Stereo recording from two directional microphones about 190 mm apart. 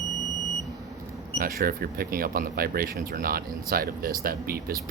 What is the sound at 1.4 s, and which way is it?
A man's voice, 50° right (ahead or behind).